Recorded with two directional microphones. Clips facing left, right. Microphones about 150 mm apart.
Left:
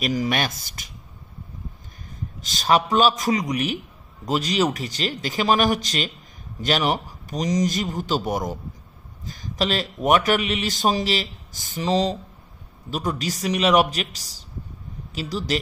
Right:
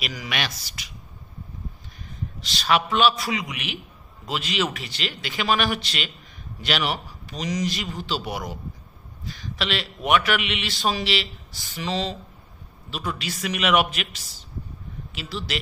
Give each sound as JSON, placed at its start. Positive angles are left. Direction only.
{"t": 0.0, "sound": "a man's voice", "side_deg": 45}
{"t": 2.4, "sound": "a man's voice", "side_deg": 45}